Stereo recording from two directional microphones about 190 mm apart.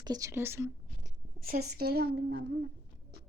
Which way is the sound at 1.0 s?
50° right (ahead or behind).